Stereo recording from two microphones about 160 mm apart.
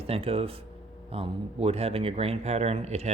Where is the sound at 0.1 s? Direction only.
35° right (ahead or behind).